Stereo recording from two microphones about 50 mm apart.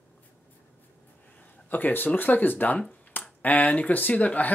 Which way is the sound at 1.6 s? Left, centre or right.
Left.